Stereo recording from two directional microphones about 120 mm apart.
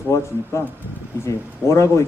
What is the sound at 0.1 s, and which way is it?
Speech, 20° left (ahead or behind).